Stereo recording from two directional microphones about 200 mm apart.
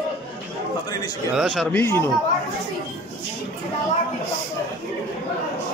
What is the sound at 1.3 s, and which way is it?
Speech, centre (ahead or behind).